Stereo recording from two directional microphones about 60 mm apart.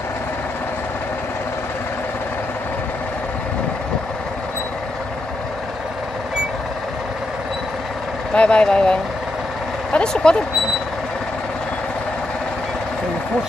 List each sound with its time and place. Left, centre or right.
8.4 s speech: centre
9.9 s speech: centre